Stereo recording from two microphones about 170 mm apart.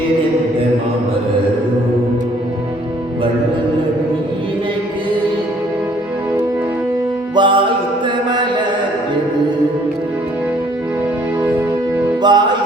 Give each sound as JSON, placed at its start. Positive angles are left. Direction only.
{"t": 7.3, "sound": "music", "side_deg": -30}
{"t": 12.2, "sound": "music", "side_deg": -25}